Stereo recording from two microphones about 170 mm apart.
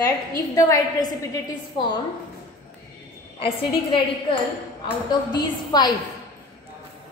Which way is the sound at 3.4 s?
30° left (ahead or behind).